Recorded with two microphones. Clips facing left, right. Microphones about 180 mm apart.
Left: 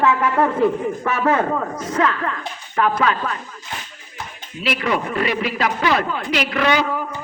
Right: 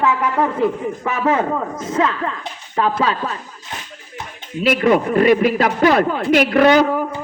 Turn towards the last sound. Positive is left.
turn(degrees=-45)  # may be behind; listen again after turning